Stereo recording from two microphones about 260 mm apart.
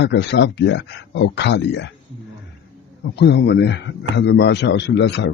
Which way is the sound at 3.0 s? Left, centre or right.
Left.